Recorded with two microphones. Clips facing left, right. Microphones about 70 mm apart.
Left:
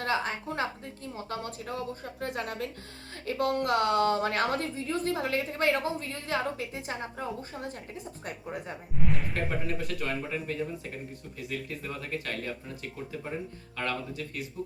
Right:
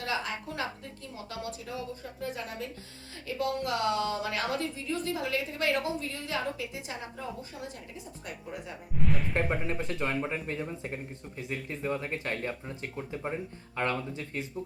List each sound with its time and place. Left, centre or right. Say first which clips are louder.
0.0 s a woman's voice: left 3 dB; left
9.0 s music: right 1 dB; centre
9.3 s speech: right 2 dB; right